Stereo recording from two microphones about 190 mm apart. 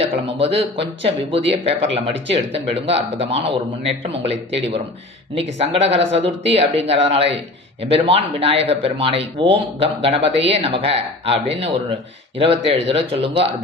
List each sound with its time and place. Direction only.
0.0 s speech: 30° right (ahead or behind)
5.4 s speech: 30° right (ahead or behind)